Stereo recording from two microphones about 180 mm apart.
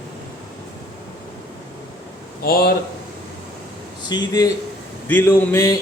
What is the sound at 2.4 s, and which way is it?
Speech, 55° left (ahead or behind).